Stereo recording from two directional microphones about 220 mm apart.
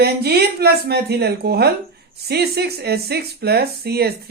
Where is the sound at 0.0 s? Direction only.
45° right (ahead or behind).